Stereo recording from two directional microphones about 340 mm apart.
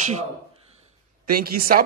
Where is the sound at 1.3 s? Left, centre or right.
Right.